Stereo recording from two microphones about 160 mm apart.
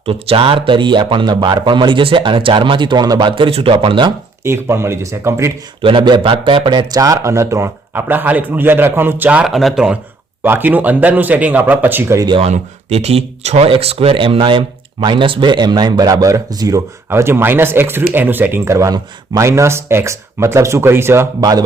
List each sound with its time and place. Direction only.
0.0 s speech: 35° right (ahead or behind)
4.4 s speech: 15° right (ahead or behind)
5.8 s speech: 30° right (ahead or behind)
12.3 s a man's voice: 40° right (ahead or behind); by 21.6 s 20° right (ahead or behind)